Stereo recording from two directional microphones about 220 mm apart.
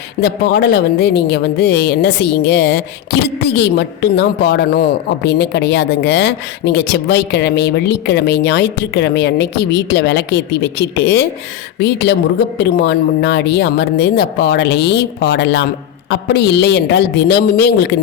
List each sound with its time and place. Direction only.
0.2 s a woman's voice: 50° left (ahead or behind)